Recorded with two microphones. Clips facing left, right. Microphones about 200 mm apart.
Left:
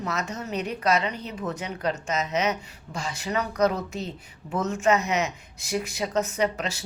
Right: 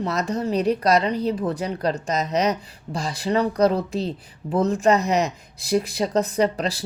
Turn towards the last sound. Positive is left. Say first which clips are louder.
# right 5 dB
turn(degrees=-35)  # may be behind; listen again after turning